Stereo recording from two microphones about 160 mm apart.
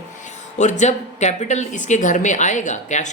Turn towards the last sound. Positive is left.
turn(degrees=50)  # may be behind; listen again after turning